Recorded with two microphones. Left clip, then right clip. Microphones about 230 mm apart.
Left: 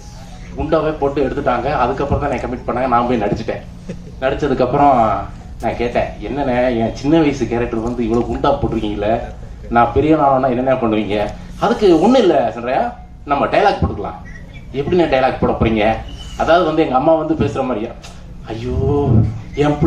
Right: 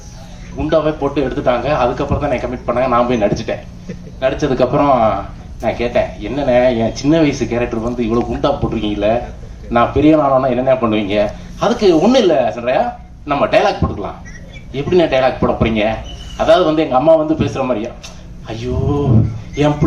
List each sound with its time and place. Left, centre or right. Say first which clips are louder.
0.7 s speech: right 1 dB; right